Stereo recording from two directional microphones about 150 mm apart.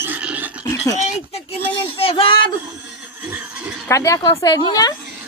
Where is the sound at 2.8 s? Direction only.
10° right (ahead or behind).